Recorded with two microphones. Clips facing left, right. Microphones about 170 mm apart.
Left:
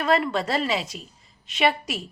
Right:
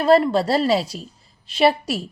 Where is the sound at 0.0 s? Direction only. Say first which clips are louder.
Right 7 dB; 35° right (ahead or behind).